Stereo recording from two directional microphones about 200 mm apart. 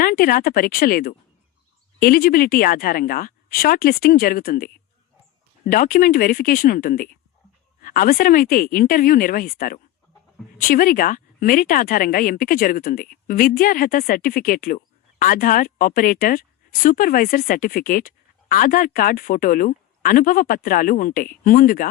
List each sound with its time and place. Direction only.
0.0 s speech: 45° left (ahead or behind)